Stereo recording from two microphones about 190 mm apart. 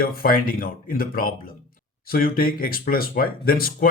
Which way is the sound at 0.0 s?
50° left (ahead or behind).